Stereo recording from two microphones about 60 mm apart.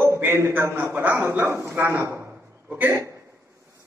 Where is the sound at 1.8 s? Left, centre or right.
Right.